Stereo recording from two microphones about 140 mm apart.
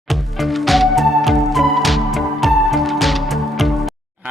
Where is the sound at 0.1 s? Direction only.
Centre (ahead or behind).